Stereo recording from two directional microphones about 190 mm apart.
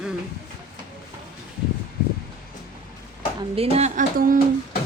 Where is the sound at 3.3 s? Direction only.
30° right (ahead or behind).